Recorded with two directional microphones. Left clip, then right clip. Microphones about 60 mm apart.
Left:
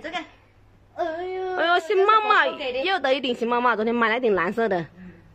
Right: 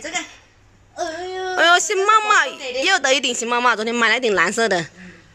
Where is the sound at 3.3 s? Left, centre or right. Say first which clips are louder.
Right 3 dB; centre.